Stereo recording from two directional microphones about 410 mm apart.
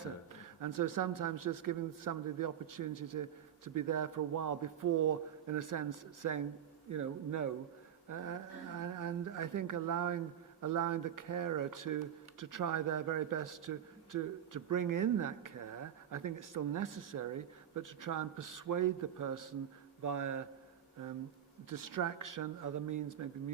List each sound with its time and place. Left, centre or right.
0.6 s speech: right
21.7 s speech: right